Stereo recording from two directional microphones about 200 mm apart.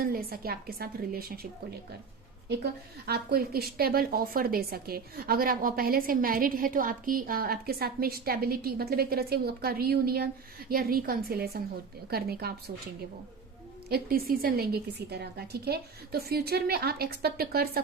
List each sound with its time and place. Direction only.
0.0 s a woman's voice: 45° right (ahead or behind)
3.1 s a woman's voice: 50° right (ahead or behind)
13.9 s a woman's voice: 50° right (ahead or behind)